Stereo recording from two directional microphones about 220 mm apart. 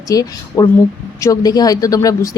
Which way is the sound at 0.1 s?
15° left (ahead or behind).